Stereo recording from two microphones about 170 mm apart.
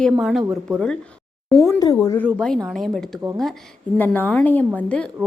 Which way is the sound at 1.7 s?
20° left (ahead or behind).